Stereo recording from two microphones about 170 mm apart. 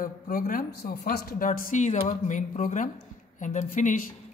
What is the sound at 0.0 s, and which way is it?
Speech, 60° left (ahead or behind).